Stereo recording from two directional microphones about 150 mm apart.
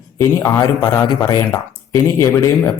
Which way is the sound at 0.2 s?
20° left (ahead or behind).